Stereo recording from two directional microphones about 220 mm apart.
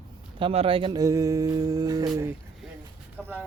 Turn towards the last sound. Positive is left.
turn(degrees=-10)  # may be behind; listen again after turning